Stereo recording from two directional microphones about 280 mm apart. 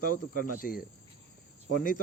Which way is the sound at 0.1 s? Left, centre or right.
Left.